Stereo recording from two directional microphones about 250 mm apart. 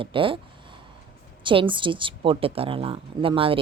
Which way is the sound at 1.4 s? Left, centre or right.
Centre.